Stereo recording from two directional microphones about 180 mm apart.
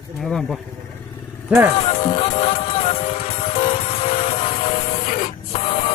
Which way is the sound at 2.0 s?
30° left (ahead or behind).